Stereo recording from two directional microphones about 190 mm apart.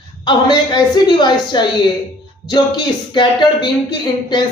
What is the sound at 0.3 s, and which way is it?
A woman's voice, 20° left (ahead or behind).